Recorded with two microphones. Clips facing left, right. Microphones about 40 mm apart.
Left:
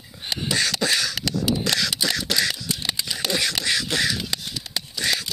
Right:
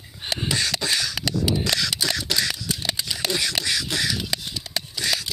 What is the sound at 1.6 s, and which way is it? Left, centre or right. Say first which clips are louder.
Single-lens reflex camera: left 1 dB; left.